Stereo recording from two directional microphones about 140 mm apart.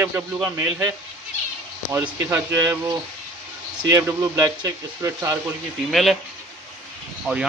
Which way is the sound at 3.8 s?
25° right (ahead or behind).